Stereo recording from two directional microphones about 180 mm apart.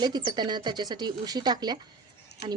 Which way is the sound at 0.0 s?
25° right (ahead or behind).